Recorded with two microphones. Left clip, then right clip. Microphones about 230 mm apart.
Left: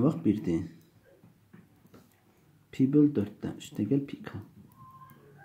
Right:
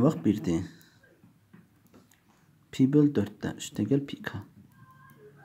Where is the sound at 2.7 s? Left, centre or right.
Right.